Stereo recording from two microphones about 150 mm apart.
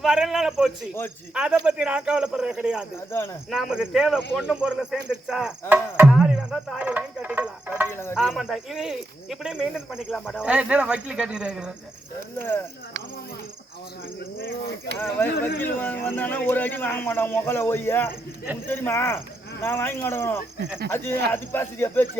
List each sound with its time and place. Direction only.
0.0 s a man's voice: 5° right (ahead or behind)
6.1 s speech: 5° right (ahead or behind)
7.9 s a man's voice: 15° left (ahead or behind)
8.1 s speech: centre (ahead or behind)
12.4 s a man's voice: 15° left (ahead or behind)
14.3 s speech: 90° left
14.9 s a man's voice: 15° left (ahead or behind)